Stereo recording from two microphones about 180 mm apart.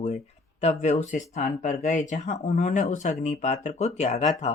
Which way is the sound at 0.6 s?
40° left (ahead or behind).